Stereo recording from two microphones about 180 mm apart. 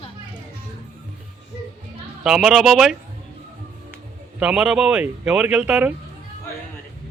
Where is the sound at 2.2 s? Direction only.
Centre (ahead or behind).